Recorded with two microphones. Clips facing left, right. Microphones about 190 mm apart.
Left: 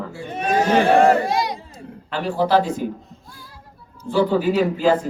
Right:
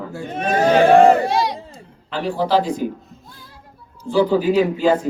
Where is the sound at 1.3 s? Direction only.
30° right (ahead or behind).